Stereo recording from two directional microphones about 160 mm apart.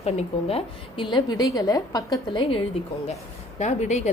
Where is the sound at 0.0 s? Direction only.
40° left (ahead or behind).